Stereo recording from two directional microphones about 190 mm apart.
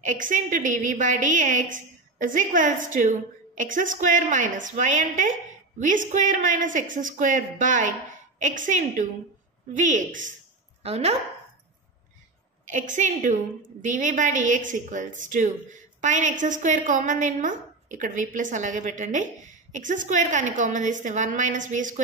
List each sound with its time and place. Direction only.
0.0 s a woman's voice: 45° right (ahead or behind)
12.6 s a woman's voice: 40° right (ahead or behind)